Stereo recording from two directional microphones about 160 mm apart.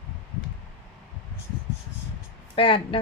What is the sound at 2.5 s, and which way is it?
Speech, 30° left (ahead or behind).